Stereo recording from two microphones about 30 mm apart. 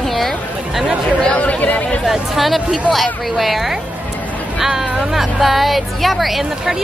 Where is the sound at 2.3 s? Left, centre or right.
Centre.